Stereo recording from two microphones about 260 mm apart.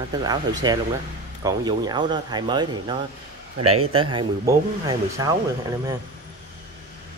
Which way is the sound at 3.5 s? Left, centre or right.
Right.